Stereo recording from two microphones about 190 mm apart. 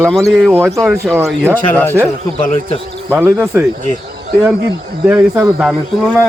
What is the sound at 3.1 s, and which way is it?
Speech, 10° right (ahead or behind).